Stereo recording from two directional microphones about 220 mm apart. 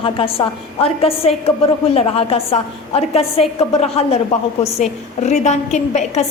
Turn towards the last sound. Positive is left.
turn(degrees=30)  # may be behind; listen again after turning